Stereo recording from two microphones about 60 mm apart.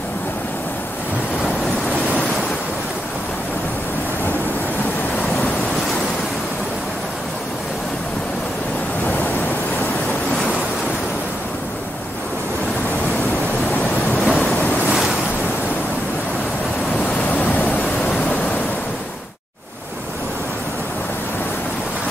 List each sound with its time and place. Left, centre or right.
14.2 s waves: centre
17.3 s waves: left